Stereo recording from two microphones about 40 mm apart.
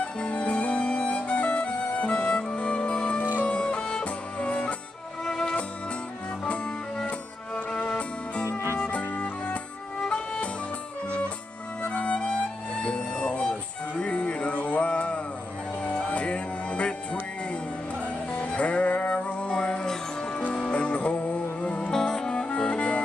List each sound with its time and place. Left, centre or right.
0.0 s music: left
5.2 s music: centre
7.8 s music: left
9.9 s music: centre
11.8 s music: left
19.5 s music: left
21.9 s music: centre